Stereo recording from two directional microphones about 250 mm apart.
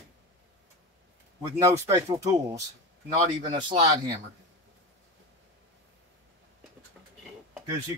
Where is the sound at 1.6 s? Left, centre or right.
Centre.